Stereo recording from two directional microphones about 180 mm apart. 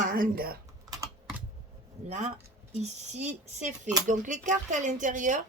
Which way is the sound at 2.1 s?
40° right (ahead or behind).